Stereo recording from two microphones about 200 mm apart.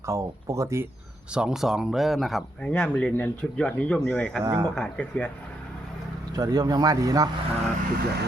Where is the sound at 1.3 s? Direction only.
5° right (ahead or behind).